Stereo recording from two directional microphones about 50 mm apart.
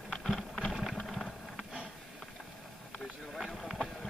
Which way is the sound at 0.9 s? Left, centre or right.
Centre.